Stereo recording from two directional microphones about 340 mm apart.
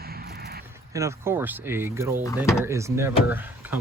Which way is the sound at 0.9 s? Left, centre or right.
Centre.